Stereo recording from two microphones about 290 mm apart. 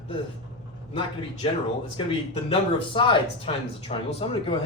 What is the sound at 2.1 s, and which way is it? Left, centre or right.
Speech, centre.